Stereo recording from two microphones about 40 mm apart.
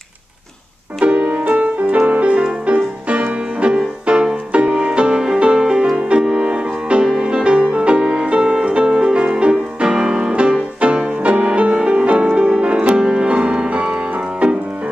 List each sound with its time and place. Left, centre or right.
1.0 s music: right
1.5 s keyboard: right
2.6 s music: right
5.5 s music: centre
9.2 s music: right
10.8 s music: right